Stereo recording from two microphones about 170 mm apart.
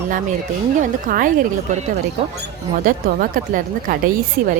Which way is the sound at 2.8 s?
55° right (ahead or behind).